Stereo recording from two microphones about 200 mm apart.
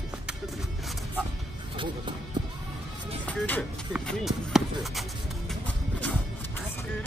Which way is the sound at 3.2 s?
10° left (ahead or behind).